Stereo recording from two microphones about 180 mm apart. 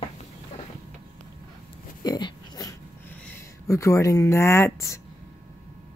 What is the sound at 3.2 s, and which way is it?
Speech, 15° left (ahead or behind).